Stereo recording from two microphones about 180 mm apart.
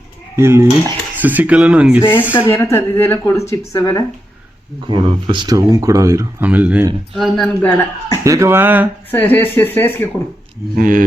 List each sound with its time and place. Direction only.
0.3 s speech: 15° right (ahead or behind)
2.0 s speech: 10° left (ahead or behind)
4.9 s speech: 25° right (ahead or behind); by 8.2 s 10° left (ahead or behind)
8.2 s speech: 15° right (ahead or behind)
9.1 s speech: 10° left (ahead or behind)
10.8 s speech: 50° right (ahead or behind)